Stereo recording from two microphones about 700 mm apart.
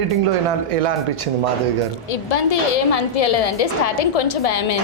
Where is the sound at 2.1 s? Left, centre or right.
Left.